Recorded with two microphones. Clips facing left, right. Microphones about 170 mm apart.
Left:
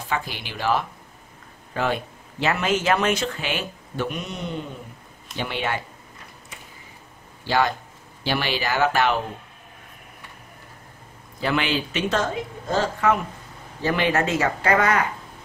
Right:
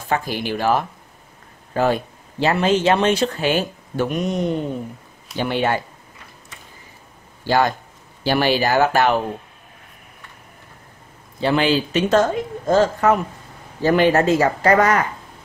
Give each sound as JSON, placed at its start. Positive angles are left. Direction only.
{"t": 0.1, "sound": "speech", "side_deg": -45}
{"t": 7.4, "sound": "speech", "side_deg": -45}
{"t": 11.3, "sound": "speech", "side_deg": -30}